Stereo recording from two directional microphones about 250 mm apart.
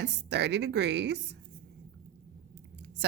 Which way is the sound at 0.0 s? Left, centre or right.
Right.